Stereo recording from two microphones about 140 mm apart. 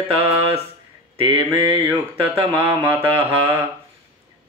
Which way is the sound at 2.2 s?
15° right (ahead or behind).